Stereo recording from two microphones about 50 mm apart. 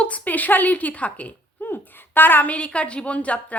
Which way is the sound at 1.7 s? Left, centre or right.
Left.